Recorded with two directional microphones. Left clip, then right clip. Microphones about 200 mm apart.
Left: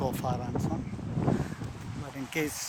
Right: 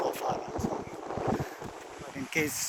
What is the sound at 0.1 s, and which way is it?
Vehicle, 25° left (ahead or behind).